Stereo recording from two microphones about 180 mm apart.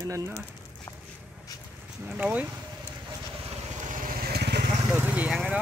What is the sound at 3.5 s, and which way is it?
Vehicle, 45° right (ahead or behind).